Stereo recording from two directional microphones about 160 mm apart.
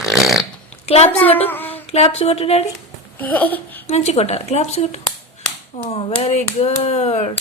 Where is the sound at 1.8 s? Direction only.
40° left (ahead or behind).